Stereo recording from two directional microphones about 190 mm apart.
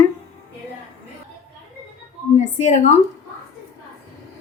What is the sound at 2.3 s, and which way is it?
Speech, 40° left (ahead or behind).